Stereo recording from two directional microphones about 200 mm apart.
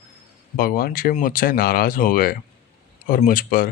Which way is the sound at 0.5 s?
45° left (ahead or behind).